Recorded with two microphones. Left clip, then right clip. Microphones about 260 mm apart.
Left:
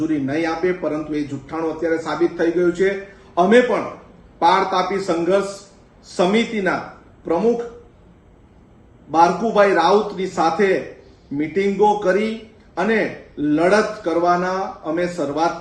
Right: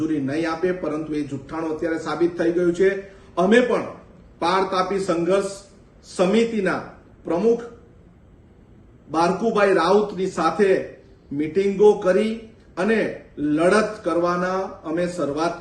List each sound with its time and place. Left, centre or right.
0.0 s a man's voice: centre
9.1 s a man's voice: centre